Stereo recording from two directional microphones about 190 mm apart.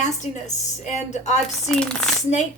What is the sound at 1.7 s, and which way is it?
Speech, centre (ahead or behind).